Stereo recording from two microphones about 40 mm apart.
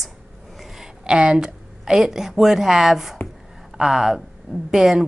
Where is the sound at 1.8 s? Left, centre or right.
Centre.